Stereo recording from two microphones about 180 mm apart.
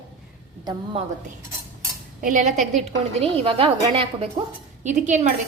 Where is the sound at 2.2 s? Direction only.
45° right (ahead or behind).